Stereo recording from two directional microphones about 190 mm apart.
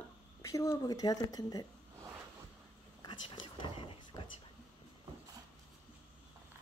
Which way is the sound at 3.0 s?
25° left (ahead or behind).